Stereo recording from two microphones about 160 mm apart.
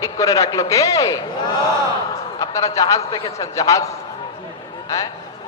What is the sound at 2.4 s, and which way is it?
A man's voice, 20° left (ahead or behind).